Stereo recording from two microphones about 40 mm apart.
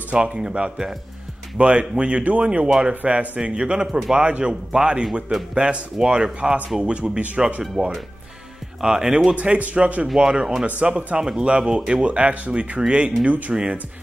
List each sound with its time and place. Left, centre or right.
0.1 s speech: right
2.6 s speech: centre
2.9 s speech: right
3.3 s speech: right
7.8 s speech: centre
9.3 s speech: right
10.1 s speech: right